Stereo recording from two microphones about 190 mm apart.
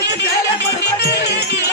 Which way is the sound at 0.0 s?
65° left (ahead or behind).